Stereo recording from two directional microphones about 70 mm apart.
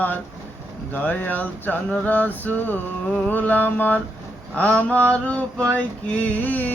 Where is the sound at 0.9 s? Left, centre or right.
Left.